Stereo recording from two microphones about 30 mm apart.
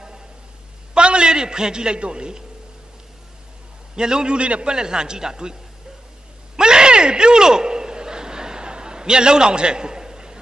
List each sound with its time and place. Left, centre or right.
0.9 s a man's voice: right
3.9 s a man's voice: right
4.7 s a man's voice: right
6.5 s a sound: right